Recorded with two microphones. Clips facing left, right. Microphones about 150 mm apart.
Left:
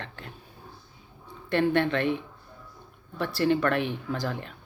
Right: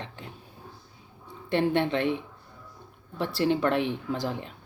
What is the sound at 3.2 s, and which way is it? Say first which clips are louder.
Speech: left 1 dB; 20° right (ahead or behind).